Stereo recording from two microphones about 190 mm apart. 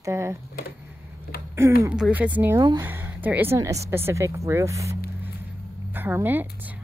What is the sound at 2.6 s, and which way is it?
Speech, 20° right (ahead or behind).